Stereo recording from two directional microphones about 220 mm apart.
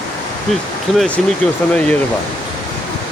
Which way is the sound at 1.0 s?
5° left (ahead or behind).